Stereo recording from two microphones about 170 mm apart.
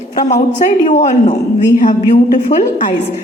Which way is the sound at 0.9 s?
45° left (ahead or behind).